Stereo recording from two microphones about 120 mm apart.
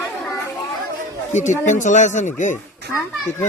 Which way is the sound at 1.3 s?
85° left.